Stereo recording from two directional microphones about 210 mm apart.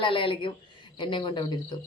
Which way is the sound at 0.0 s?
25° left (ahead or behind).